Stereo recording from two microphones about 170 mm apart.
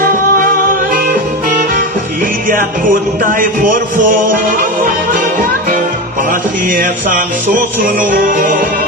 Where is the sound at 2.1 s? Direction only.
55° right (ahead or behind).